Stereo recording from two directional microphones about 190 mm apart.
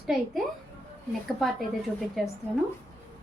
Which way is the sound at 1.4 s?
Centre (ahead or behind).